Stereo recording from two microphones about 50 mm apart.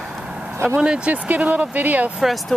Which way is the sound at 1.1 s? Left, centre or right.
Right.